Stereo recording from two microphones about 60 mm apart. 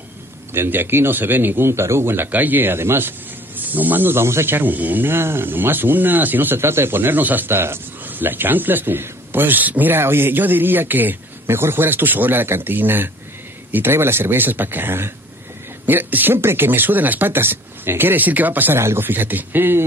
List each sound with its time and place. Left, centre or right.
0.5 s speech: right
18.8 s speech: right
19.0 s speech: right